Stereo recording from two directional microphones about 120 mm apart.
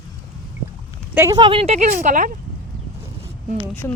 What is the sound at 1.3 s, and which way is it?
Speech, 35° right (ahead or behind).